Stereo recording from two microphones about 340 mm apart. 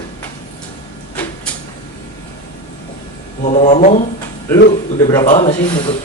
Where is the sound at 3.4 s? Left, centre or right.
Centre.